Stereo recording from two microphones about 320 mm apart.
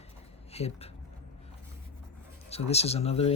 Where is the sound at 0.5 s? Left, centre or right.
Centre.